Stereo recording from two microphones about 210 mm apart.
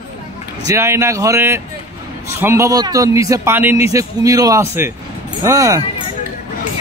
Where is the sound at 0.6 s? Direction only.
15° right (ahead or behind).